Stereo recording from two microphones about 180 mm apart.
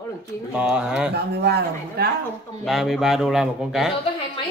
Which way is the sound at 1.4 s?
60° right (ahead or behind).